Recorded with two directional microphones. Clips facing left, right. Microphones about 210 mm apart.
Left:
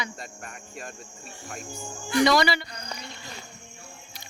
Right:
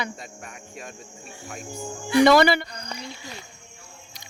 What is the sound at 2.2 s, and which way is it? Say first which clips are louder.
Speech: right 6 dB; 55° right (ahead or behind).